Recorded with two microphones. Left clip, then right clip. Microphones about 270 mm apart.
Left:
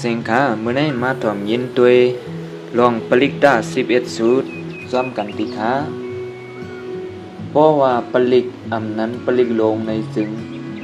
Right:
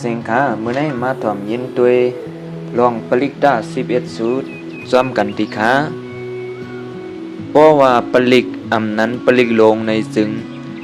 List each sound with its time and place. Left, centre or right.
0.0 s speech: centre
4.9 s a man's voice: right
7.5 s a man's voice: right